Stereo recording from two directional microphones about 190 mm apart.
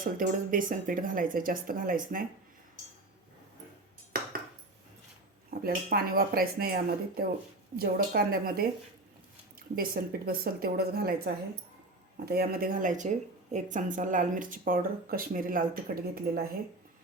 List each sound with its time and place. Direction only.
0.0 s speech: 45° right (ahead or behind)
5.5 s speech: 50° right (ahead or behind)
12.2 s speech: 55° right (ahead or behind)